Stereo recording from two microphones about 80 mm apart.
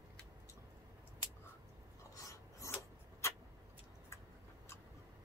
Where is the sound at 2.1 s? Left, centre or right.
Left.